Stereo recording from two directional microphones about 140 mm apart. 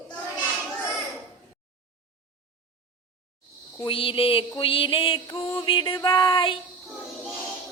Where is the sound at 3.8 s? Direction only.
40° left (ahead or behind).